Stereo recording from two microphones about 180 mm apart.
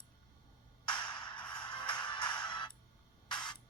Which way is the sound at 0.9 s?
25° left (ahead or behind).